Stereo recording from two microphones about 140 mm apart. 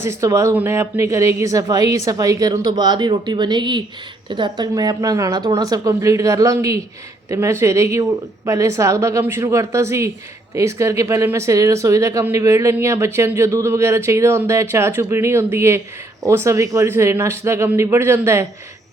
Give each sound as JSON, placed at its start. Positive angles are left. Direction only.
{"t": 0.0, "sound": "speech", "side_deg": -20}